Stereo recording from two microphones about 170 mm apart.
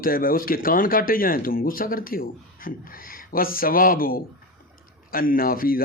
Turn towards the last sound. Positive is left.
turn(degrees=60)  # may be behind; listen again after turning